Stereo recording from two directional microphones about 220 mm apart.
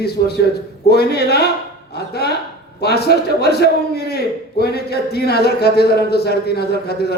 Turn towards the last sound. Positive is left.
turn(degrees=45)  # may be behind; listen again after turning